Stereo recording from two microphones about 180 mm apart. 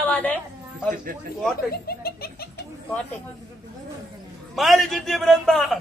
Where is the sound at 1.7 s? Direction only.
60° left (ahead or behind).